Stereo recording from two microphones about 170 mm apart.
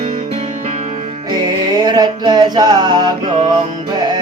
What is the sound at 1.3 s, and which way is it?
Music, 25° right (ahead or behind).